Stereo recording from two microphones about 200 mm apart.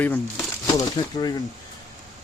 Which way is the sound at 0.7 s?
20° left (ahead or behind).